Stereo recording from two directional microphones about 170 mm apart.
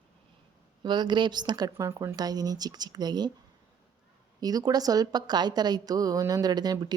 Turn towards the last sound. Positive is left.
turn(degrees=-25)  # may be behind; listen again after turning